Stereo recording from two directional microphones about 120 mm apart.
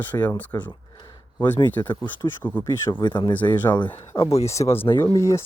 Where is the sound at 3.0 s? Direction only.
40° left (ahead or behind).